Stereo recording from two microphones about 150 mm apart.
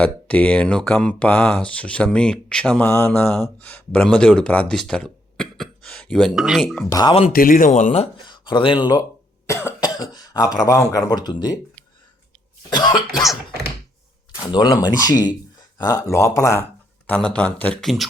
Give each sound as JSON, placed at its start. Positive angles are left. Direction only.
{"t": 0.0, "sound": "speech", "side_deg": 10}
{"t": 6.9, "sound": "speech", "side_deg": 30}
{"t": 7.3, "sound": "speech", "side_deg": 65}
{"t": 8.2, "sound": "speech", "side_deg": 30}
{"t": 12.7, "sound": "cough", "side_deg": 30}
{"t": 14.4, "sound": "speech", "side_deg": 30}
{"t": 17.1, "sound": "speech", "side_deg": 5}